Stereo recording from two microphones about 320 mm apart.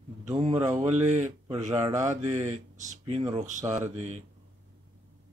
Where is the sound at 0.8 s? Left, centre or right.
Right.